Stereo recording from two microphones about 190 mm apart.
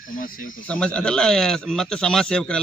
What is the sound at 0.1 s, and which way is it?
Speech, 45° left (ahead or behind).